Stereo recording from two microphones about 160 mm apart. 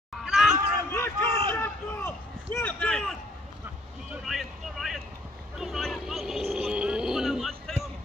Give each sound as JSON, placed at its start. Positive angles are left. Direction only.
{"t": 0.2, "sound": "chatter", "side_deg": -5}
{"t": 0.9, "sound": "crowd", "side_deg": 15}
{"t": 1.5, "sound": "a sound", "side_deg": 15}
{"t": 4.1, "sound": "vehicle", "side_deg": 0}